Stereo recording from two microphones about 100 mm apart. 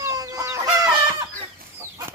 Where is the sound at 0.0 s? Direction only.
35° right (ahead or behind).